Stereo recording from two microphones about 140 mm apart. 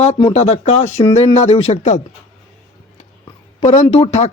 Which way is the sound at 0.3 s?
50° left (ahead or behind).